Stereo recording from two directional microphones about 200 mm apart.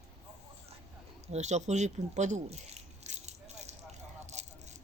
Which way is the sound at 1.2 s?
35° right (ahead or behind).